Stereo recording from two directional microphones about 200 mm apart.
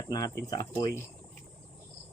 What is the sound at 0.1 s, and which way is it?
Speech, 20° left (ahead or behind).